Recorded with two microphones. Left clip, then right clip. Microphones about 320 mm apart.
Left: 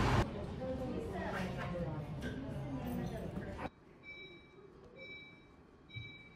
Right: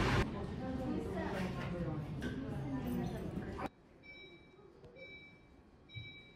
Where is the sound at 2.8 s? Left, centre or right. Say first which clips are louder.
Right 1 dB; centre.